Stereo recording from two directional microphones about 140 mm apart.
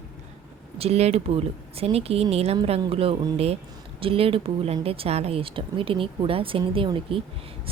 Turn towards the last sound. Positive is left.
turn(degrees=-40)  # may be behind; listen again after turning